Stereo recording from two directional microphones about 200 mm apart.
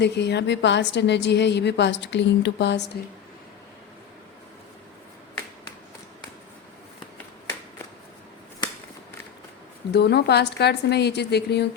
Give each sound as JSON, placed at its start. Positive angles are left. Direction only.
{"t": 0.0, "sound": "a woman's voice", "side_deg": 60}
{"t": 9.9, "sound": "a woman's voice", "side_deg": 55}